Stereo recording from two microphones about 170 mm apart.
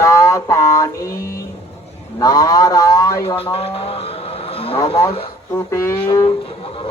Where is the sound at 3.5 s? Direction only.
35° left (ahead or behind).